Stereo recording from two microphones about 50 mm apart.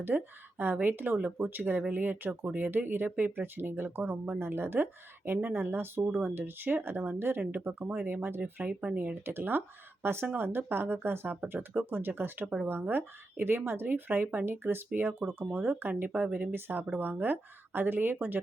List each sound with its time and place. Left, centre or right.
0.1 s speech: centre
0.6 s speech: right
7.7 s speech: right
8.0 s speech: right